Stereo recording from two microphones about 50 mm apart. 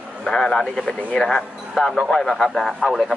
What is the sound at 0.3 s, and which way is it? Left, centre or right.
Speech, centre.